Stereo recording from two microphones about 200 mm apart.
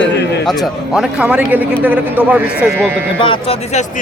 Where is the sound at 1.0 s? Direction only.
5° right (ahead or behind).